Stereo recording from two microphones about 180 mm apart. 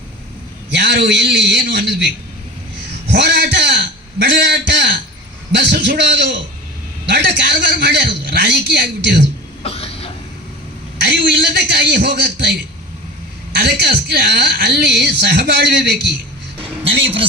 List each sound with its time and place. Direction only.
0.7 s a woman's voice: 70° right (ahead or behind)
9.6 s cough: 35° left (ahead or behind)
11.0 s a woman's voice: 65° right (ahead or behind)